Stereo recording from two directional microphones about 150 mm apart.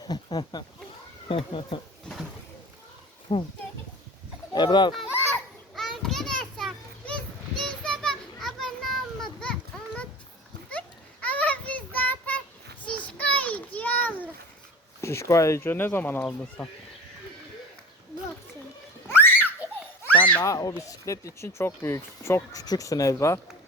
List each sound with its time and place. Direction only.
0.0 s speech: 25° left (ahead or behind)
3.3 s speech: 35° left (ahead or behind)
4.5 s speech: 30° left (ahead or behind)
5.7 s children playing: centre (ahead or behind)
10.7 s a sound: 10° left (ahead or behind)
15.0 s speech: 20° left (ahead or behind)
19.0 s a sound: 15° left (ahead or behind)
20.4 s speech: 25° left (ahead or behind)